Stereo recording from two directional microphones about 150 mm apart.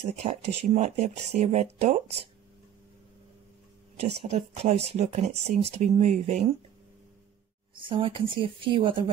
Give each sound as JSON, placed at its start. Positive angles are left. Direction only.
{"t": 0.1, "sound": "speech", "side_deg": -45}
{"t": 4.0, "sound": "speech", "side_deg": -45}
{"t": 7.7, "sound": "a woman's voice", "side_deg": -35}